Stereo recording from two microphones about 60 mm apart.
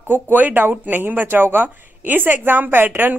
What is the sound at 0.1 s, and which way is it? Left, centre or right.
Speech, right.